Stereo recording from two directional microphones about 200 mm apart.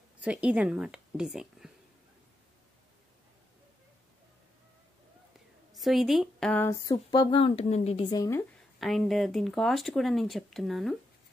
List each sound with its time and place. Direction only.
0.2 s a woman's voice: 5° right (ahead or behind)
5.7 s speech: centre (ahead or behind); by 8.5 s 15° left (ahead or behind)
8.7 s speech: centre (ahead or behind)